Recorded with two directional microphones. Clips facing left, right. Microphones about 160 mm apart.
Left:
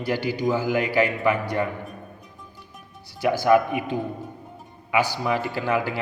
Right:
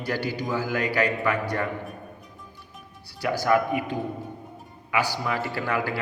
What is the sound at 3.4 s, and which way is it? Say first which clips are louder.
Speech: left 3 dB; 20° left (ahead or behind).